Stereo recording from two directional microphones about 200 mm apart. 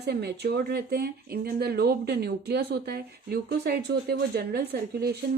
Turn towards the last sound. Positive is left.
turn(degrees=-50)  # may be behind; listen again after turning